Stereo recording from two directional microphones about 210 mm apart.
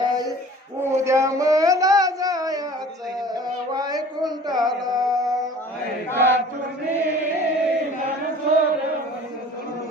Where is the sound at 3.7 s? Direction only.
20° right (ahead or behind).